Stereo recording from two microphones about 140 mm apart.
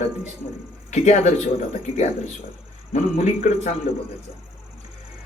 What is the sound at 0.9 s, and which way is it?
Speech, 55° left (ahead or behind).